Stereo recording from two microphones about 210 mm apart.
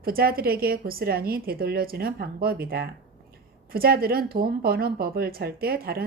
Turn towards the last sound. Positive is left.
turn(degrees=-45)  # may be behind; listen again after turning